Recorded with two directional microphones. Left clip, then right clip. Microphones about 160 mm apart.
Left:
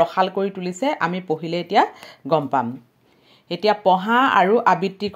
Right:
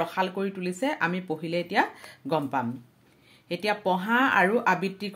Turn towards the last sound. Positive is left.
turn(degrees=35)  # may be behind; listen again after turning